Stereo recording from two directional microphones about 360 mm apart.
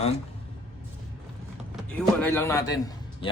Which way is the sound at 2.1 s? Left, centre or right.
Centre.